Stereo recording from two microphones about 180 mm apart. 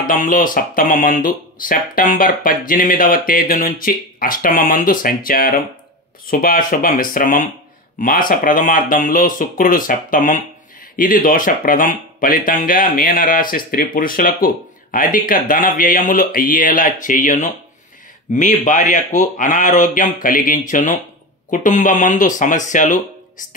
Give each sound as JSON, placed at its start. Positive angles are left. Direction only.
{"t": 0.0, "sound": "speech", "side_deg": 50}